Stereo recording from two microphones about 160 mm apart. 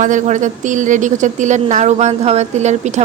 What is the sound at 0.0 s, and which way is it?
A woman's voice, 50° right (ahead or behind).